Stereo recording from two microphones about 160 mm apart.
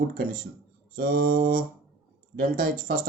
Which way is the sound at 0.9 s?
65° right (ahead or behind).